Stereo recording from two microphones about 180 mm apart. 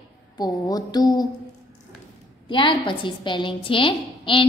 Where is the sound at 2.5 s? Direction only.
25° left (ahead or behind).